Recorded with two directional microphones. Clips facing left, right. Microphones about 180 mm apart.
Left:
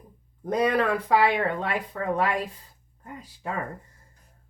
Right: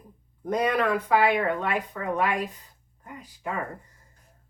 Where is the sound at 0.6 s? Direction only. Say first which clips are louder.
Left 2 dB; 35° left (ahead or behind).